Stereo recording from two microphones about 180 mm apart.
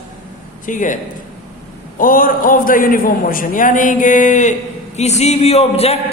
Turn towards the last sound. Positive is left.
turn(degrees=35)  # may be behind; listen again after turning